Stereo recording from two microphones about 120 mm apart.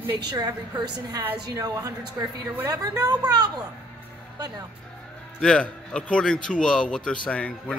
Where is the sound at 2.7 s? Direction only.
30° right (ahead or behind).